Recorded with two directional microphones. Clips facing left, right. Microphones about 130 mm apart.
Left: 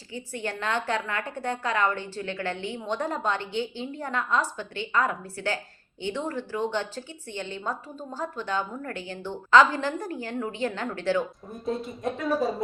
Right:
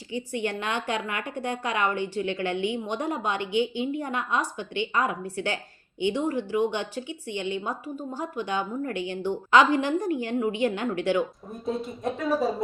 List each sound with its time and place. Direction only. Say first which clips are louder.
0.3 s a woman's voice: even; 15° right (ahead or behind)
11.5 s speech: even; centre (ahead or behind)